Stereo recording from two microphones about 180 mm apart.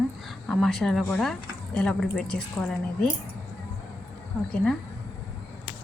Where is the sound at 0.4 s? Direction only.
Centre (ahead or behind).